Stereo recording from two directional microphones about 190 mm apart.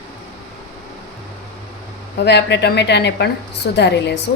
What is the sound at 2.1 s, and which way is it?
A woman's voice, 65° left (ahead or behind).